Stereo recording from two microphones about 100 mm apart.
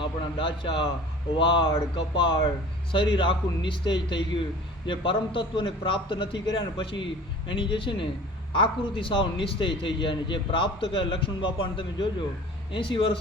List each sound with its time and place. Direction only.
0.0 s a man's voice: 55° left (ahead or behind)